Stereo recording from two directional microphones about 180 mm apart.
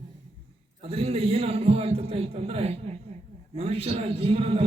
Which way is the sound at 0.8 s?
30° right (ahead or behind).